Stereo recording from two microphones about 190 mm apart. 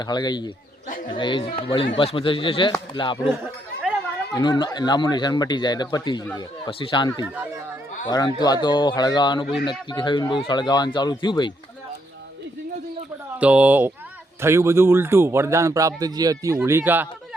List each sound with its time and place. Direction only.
0.0 s speech: 20° left (ahead or behind)
4.4 s speech: 25° left (ahead or behind)
13.4 s speech: 5° right (ahead or behind)